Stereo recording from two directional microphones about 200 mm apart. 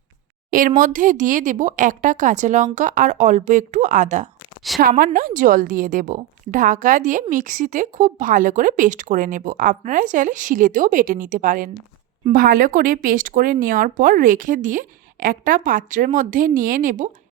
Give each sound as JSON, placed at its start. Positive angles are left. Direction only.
{"t": 0.8, "sound": "a woman's voice", "side_deg": -40}